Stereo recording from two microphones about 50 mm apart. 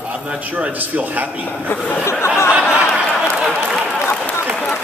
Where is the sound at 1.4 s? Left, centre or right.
Left.